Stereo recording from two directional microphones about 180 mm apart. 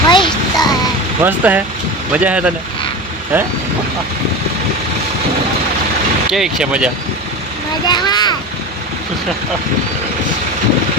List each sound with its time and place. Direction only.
0.1 s child singing: 25° left (ahead or behind)
1.2 s speech: 10° right (ahead or behind)
6.3 s speech: 5° right (ahead or behind)
7.9 s a sound: 25° left (ahead or behind)